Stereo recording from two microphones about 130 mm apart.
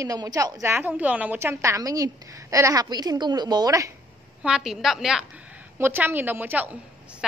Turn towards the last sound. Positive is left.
turn(degrees=-10)  # may be behind; listen again after turning